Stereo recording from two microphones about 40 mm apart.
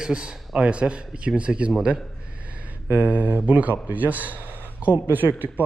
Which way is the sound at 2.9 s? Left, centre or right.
Right.